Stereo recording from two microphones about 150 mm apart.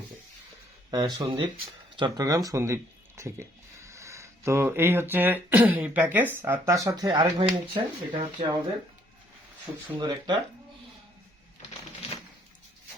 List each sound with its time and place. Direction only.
0.9 s speech: 25° right (ahead or behind)
10.0 s speech: 30° right (ahead or behind)